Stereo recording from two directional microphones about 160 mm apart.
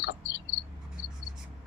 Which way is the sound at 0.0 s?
90° left.